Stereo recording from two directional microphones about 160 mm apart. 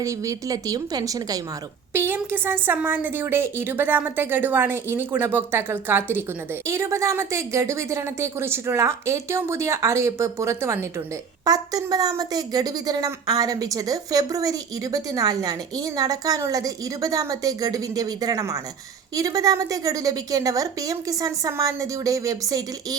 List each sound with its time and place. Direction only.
0.0 s a woman's voice: 20° right (ahead or behind)